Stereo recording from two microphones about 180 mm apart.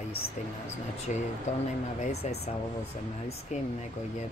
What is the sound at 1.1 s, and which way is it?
Speech, 40° left (ahead or behind).